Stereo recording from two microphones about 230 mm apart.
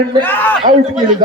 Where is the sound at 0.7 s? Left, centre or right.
Right.